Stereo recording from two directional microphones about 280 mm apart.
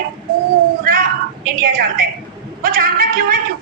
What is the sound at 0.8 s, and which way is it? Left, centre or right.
Cat, right.